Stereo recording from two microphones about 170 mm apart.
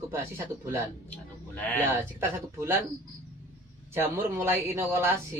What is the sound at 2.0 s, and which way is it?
Speech, 15° right (ahead or behind).